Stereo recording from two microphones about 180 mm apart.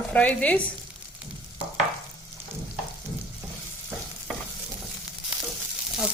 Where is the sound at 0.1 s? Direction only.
10° left (ahead or behind).